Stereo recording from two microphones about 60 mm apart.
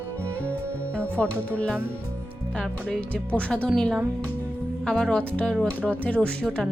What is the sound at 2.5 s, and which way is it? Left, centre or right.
Speech, centre.